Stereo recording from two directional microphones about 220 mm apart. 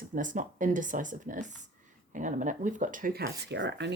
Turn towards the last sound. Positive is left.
turn(degrees=-55)  # may be behind; listen again after turning